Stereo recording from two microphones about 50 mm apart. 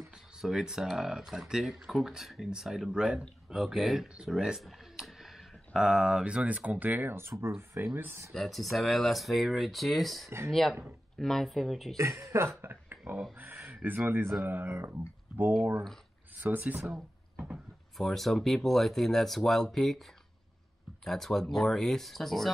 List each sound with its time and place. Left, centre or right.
0.0 s speech: centre
4.6 s a sound: centre
5.8 s speech: centre; by 7.2 s right
7.2 s speech: right
8.3 s speech: centre
12.0 s speech: right
12.6 s a sound: right
13.4 s speech: right
16.3 s speech: right
17.9 s speech: centre
21.0 s speech: centre